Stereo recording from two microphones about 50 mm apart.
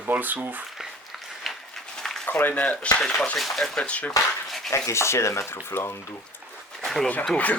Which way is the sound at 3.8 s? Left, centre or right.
Left.